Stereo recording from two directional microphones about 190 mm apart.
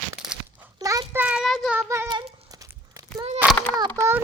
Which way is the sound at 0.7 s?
20° right (ahead or behind).